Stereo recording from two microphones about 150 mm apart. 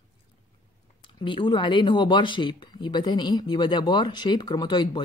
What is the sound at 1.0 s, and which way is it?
Speech, 35° left (ahead or behind).